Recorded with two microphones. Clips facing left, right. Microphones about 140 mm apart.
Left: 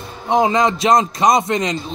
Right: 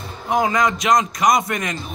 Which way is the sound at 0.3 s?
25° left (ahead or behind).